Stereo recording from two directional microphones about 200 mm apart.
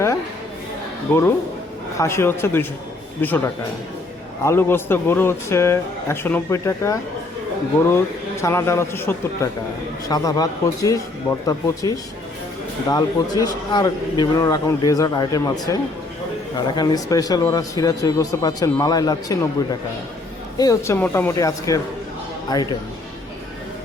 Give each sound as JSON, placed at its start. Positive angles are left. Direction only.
{"t": 2.0, "sound": "a man's voice", "side_deg": 15}
{"t": 20.6, "sound": "a man's voice", "side_deg": 15}